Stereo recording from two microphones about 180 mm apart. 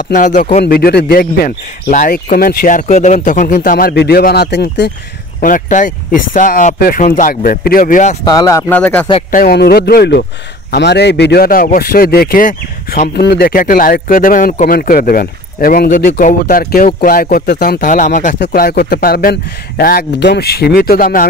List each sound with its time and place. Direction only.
0.1 s speech: 45° left (ahead or behind)
0.7 s speech: 60° left (ahead or behind)
5.4 s speech: 45° left (ahead or behind)
8.2 s speech: 20° left (ahead or behind)
9.3 s speech: 55° left (ahead or behind)
13.1 s speech: 65° left (ahead or behind)